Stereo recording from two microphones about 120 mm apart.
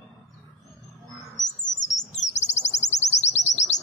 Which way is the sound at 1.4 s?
90° left.